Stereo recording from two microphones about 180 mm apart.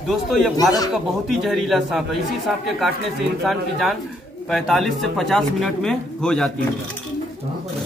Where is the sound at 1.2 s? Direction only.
Centre (ahead or behind).